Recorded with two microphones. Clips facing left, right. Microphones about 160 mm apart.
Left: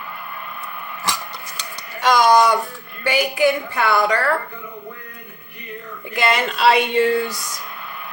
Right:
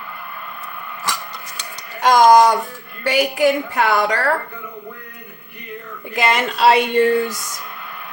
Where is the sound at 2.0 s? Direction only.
45° right (ahead or behind).